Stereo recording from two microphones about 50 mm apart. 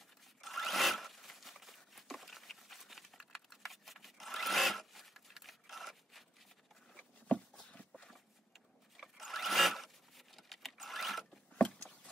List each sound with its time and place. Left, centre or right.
0.4 s zipper: centre
8.1 s a sound: centre
11.5 s vehicle: left